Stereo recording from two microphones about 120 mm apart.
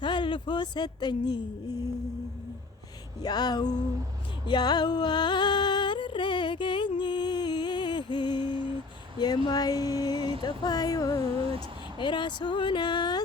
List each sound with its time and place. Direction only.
0.0 s speech: 40° left (ahead or behind)
3.2 s speech: 35° left (ahead or behind)
4.4 s music: 35° left (ahead or behind)
9.1 s speech: 35° left (ahead or behind)